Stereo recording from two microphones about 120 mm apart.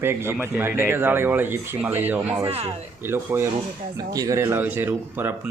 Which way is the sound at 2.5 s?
60° right (ahead or behind).